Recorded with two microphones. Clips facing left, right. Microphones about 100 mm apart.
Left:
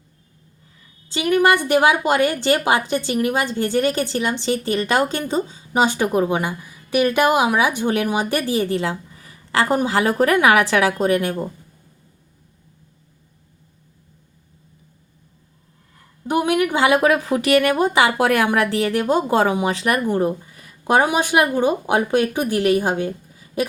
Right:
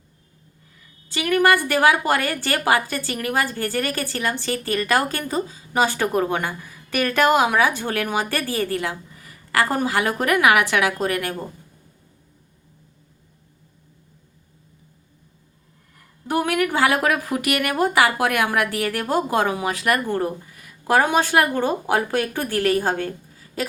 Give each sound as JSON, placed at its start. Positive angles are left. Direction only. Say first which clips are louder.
{"t": 1.1, "sound": "a woman's voice", "louder": "left 2 dB", "side_deg": 25}
{"t": 16.2, "sound": "a woman's voice", "louder": "left 3 dB", "side_deg": 20}